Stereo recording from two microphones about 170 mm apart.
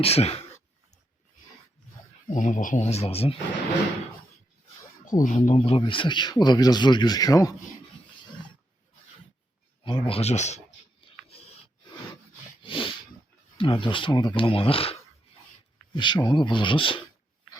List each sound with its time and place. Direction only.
0.0 s speech: 35° left (ahead or behind)
2.2 s speech: 45° left (ahead or behind)
5.2 s speech: 45° left (ahead or behind); by 7.5 s 20° left (ahead or behind)
9.8 s speech: 30° left (ahead or behind)
11.3 s rub: 35° left (ahead or behind)
12.6 s a sound: 30° left (ahead or behind)
13.6 s speech: 30° left (ahead or behind)